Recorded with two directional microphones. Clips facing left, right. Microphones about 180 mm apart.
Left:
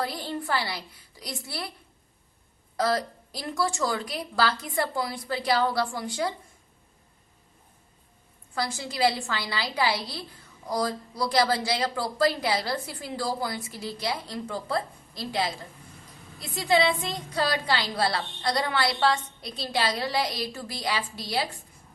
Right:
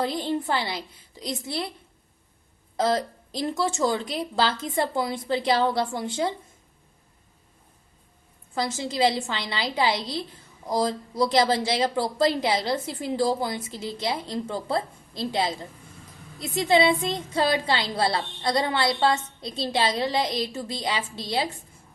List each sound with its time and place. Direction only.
0.0 s a woman's voice: 20° right (ahead or behind)
2.7 s a woman's voice: 20° right (ahead or behind)
8.5 s a woman's voice: 20° right (ahead or behind)